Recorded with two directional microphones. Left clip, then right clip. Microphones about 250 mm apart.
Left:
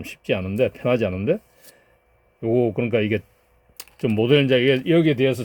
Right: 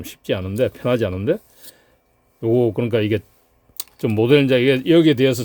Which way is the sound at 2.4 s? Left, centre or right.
Right.